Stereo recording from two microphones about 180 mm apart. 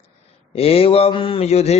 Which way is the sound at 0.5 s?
35° left (ahead or behind).